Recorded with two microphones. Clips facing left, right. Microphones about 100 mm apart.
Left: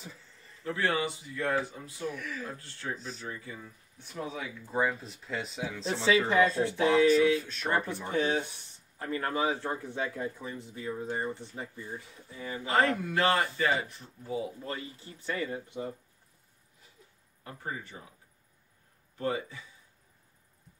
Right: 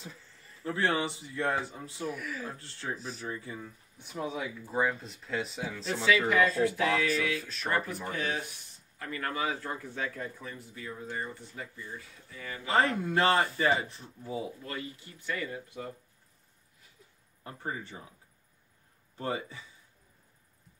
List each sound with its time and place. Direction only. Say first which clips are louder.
0.7 s speech: even; 30° right (ahead or behind)
2.0 s speech: even; 5° right (ahead or behind)
3.3 s speech: right 3 dB; 30° right (ahead or behind)
4.0 s speech: right 2 dB; 10° right (ahead or behind)
6.0 s speech: left 1 dB; 30° left (ahead or behind)
7.4 s speech: left 2 dB; centre (ahead or behind)
7.7 s speech: left 3 dB; 25° left (ahead or behind)
12.7 s speech: even; 30° right (ahead or behind)
14.6 s speech: left 1 dB; 30° left (ahead or behind)
17.4 s speech: right 1 dB; 30° right (ahead or behind)
19.1 s speech: left 2 dB; 30° right (ahead or behind)